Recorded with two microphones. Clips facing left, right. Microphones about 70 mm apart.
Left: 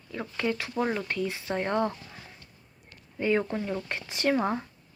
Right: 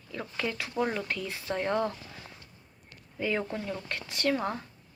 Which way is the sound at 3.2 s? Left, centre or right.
Centre.